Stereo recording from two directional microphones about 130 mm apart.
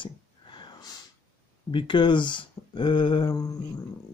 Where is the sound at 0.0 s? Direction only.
35° left (ahead or behind).